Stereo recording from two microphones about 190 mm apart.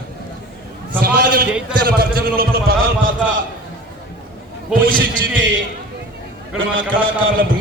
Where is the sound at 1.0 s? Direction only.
55° right (ahead or behind).